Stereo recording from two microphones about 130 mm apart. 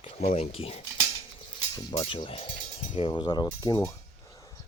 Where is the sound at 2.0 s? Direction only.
40° left (ahead or behind).